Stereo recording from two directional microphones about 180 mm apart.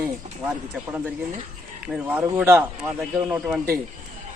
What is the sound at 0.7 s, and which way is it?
Speech, 10° right (ahead or behind).